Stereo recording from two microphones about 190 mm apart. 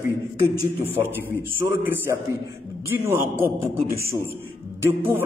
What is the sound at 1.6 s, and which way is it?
A man's voice, 15° right (ahead or behind).